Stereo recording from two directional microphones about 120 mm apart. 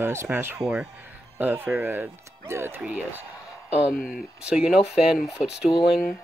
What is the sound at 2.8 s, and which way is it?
Speech, 10° right (ahead or behind).